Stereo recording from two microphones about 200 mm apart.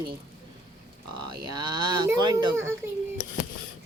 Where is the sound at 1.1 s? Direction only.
20° right (ahead or behind).